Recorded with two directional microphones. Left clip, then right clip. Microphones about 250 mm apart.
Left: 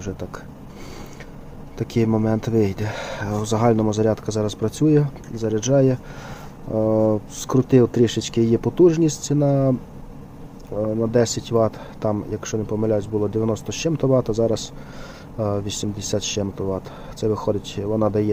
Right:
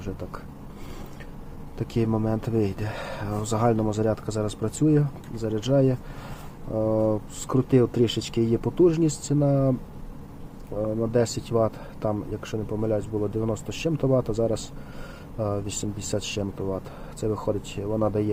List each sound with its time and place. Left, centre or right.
0.0 s speech: centre
1.8 s speech: centre
10.8 s speech: centre